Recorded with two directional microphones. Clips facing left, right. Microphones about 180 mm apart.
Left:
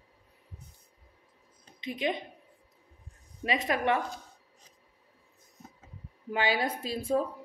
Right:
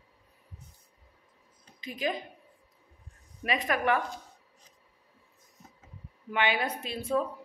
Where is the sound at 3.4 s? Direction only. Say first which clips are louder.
Even; 30° left (ahead or behind).